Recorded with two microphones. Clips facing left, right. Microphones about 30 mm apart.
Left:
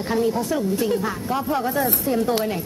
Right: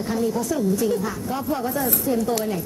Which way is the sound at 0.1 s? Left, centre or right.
Left.